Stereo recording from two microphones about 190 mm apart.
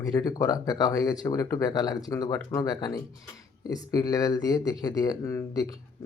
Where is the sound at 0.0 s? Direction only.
20° left (ahead or behind).